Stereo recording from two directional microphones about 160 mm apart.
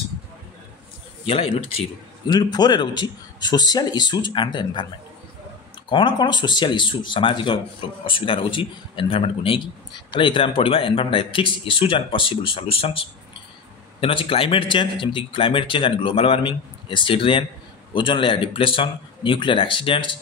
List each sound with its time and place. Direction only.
1.2 s a man's voice: 35° left (ahead or behind)
5.9 s a man's voice: 30° left (ahead or behind)